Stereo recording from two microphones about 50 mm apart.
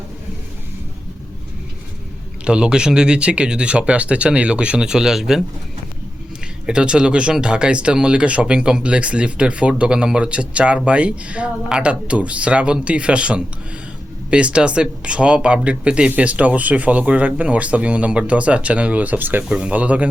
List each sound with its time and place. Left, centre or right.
2.4 s speech: centre
6.7 s speech: centre; by 19.5 s right
19.5 s speech: right